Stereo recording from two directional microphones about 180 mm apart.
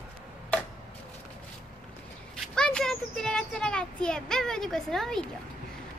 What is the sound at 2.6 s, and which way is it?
A child's voice, 5° left (ahead or behind).